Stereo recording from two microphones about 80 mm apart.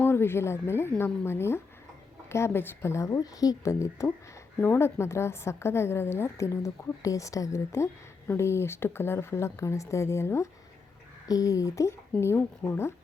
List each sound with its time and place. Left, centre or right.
0.0 s a woman's voice: left
3.2 s a woman's voice: left
11.3 s a woman's voice: left